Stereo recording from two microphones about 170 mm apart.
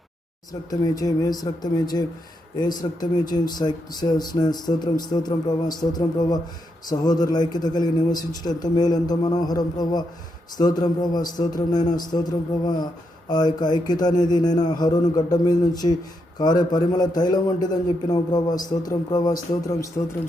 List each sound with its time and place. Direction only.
0.7 s a man's voice: 20° left (ahead or behind)